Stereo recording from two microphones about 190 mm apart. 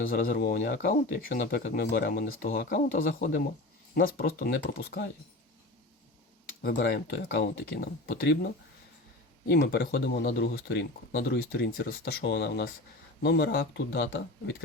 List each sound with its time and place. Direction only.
0.0 s speech: 50° left (ahead or behind)
6.6 s speech: 55° left (ahead or behind)
9.5 s speech: 60° left (ahead or behind)